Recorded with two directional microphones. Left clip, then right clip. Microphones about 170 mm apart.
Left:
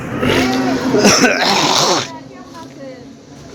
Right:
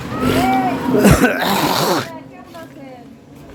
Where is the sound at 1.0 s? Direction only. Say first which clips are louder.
Left 3 dB; 30° right (ahead or behind).